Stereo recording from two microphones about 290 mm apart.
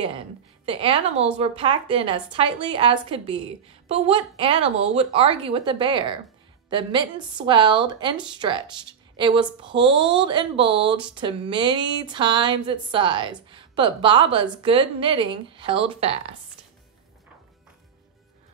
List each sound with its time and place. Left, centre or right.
0.7 s a woman's voice: centre